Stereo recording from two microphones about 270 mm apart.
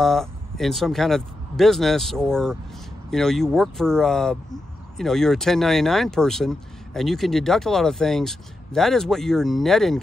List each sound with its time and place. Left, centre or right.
0.0 s speech: centre